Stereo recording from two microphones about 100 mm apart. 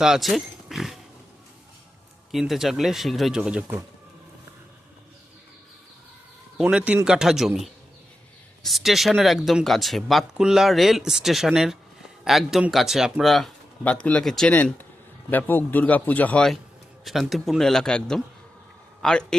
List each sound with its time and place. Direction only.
0.0 s pig: 5° right (ahead or behind)
2.3 s speech: centre (ahead or behind)
6.6 s a man's voice: 10° right (ahead or behind)
13.8 s speech: 10° left (ahead or behind)
14.5 s speech: 15° left (ahead or behind)
17.0 s speech: centre (ahead or behind)